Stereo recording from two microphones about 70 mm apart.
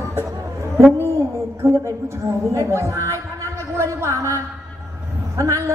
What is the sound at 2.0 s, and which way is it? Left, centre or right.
A woman's voice, right.